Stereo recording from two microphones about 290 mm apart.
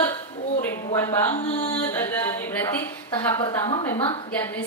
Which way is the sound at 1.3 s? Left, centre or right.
Left.